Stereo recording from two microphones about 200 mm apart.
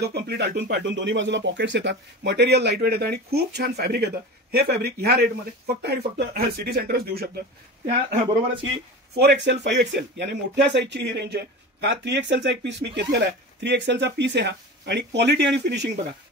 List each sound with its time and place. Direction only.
0.0 s speech: 55° right (ahead or behind)
9.1 s speech: 55° right (ahead or behind)